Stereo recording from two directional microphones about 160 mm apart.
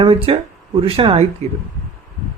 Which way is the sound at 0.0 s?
35° right (ahead or behind).